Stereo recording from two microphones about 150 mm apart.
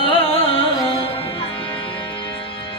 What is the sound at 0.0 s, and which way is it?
Music, 40° left (ahead or behind).